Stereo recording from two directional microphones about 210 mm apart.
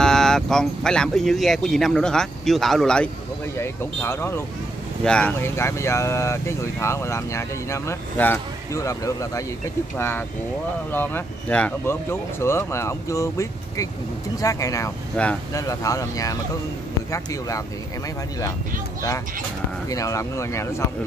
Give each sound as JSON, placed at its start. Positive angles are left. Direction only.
{"t": 0.0, "sound": "speech", "side_deg": 0}
{"t": 19.9, "sound": "speech", "side_deg": 15}